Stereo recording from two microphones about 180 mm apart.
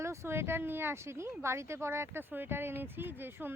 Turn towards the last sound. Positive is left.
turn(degrees=-10)  # may be behind; listen again after turning